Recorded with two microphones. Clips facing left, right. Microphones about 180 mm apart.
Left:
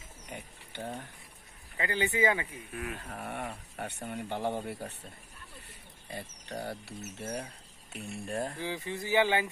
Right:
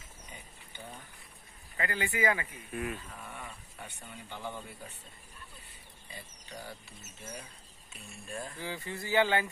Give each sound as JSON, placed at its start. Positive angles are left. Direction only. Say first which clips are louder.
{"t": 0.3, "sound": "livestock", "louder": "left 9 dB", "side_deg": 70}
{"t": 1.8, "sound": "speech", "louder": "left 3 dB", "side_deg": 20}
{"t": 2.7, "sound": "speech", "louder": "right 4 dB", "side_deg": 0}
{"t": 3.0, "sound": "speech", "louder": "left 7 dB", "side_deg": 65}
{"t": 6.0, "sound": "speech", "louder": "left 8 dB", "side_deg": 65}
{"t": 8.5, "sound": "speech", "louder": "left 3 dB", "side_deg": 15}